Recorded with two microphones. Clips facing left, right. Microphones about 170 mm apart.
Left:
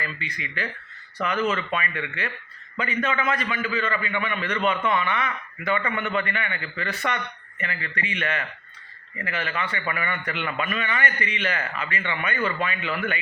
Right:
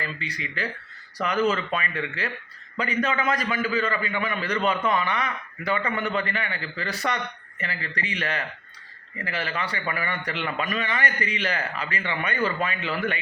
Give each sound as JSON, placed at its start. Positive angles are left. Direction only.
{"t": 0.0, "sound": "a man's voice", "side_deg": -35}